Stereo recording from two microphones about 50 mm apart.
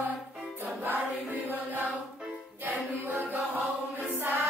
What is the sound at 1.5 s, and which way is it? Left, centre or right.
Chant, right.